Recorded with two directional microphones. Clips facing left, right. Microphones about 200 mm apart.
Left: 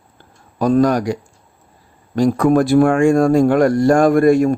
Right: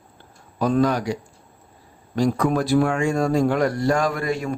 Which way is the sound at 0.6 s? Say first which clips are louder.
Left 6 dB; 45° left (ahead or behind).